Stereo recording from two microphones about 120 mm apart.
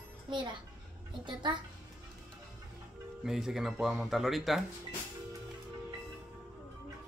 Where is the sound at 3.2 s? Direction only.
5° right (ahead or behind).